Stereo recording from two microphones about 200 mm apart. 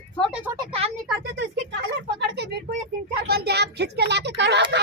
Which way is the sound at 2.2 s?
55° right (ahead or behind).